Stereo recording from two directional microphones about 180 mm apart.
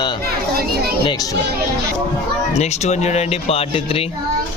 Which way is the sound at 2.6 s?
40° left (ahead or behind).